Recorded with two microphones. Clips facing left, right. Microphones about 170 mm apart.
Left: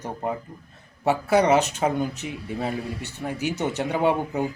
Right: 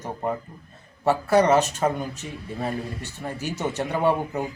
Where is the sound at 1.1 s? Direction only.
10° left (ahead or behind).